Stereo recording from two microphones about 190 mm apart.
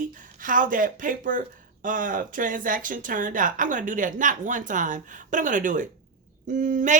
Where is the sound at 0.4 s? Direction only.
45° right (ahead or behind).